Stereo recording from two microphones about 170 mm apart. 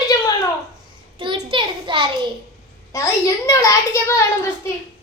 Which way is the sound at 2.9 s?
15° left (ahead or behind).